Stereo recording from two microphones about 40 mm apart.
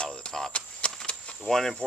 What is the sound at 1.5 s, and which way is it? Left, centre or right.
Speech, centre.